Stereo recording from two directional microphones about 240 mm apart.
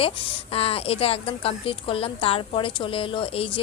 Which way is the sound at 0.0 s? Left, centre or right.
Left.